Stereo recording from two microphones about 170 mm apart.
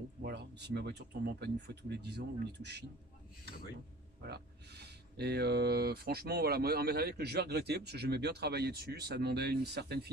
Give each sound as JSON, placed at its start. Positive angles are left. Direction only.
{"t": 0.2, "sound": "speech", "side_deg": -75}
{"t": 4.2, "sound": "speech", "side_deg": -70}